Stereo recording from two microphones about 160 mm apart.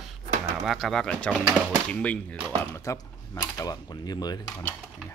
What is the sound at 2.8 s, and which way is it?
Speech, 20° left (ahead or behind).